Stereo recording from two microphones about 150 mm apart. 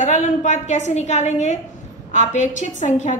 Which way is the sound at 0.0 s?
55° left (ahead or behind).